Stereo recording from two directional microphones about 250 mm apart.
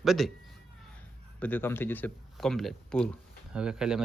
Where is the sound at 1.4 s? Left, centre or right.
Centre.